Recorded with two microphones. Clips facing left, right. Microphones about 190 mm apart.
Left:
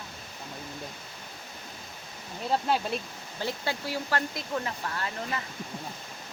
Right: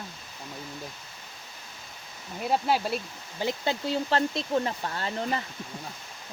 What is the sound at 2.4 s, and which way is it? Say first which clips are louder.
Speech: right 2 dB; 10° right (ahead or behind).